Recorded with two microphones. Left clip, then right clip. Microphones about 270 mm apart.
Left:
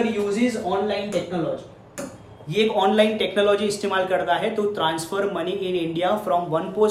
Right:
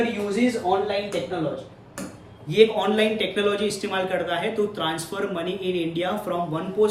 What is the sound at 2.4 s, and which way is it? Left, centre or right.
Speech, centre.